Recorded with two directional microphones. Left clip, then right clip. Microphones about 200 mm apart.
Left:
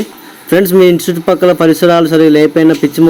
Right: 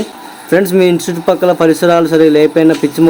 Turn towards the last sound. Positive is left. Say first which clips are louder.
# left 1 dB
turn(degrees=25)  # may be behind; listen again after turning